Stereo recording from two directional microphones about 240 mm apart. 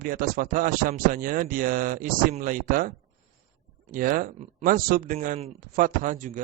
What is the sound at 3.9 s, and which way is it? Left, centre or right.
Speech, right.